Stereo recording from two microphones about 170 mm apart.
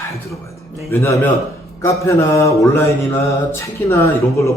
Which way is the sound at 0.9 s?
15° left (ahead or behind).